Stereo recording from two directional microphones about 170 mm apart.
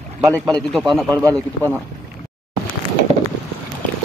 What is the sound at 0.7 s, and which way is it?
Speech, centre (ahead or behind).